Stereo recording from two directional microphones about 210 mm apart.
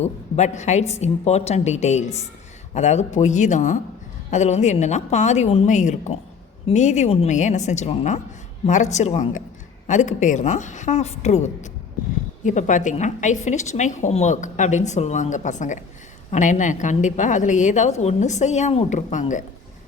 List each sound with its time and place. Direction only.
0.0 s a woman's voice: 35° left (ahead or behind)